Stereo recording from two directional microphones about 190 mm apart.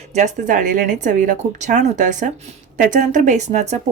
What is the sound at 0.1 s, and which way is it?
A woman's voice, 40° right (ahead or behind).